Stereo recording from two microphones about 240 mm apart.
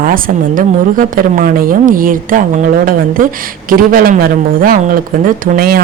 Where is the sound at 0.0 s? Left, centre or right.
Right.